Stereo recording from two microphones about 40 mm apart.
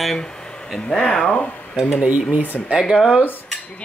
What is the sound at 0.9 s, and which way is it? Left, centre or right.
Speech, left.